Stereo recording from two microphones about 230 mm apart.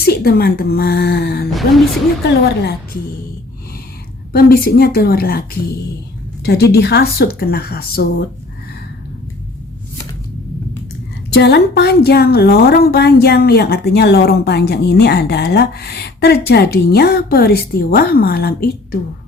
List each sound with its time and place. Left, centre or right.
0.0 s a woman's voice: left
4.3 s a woman's voice: left
11.3 s a woman's voice: left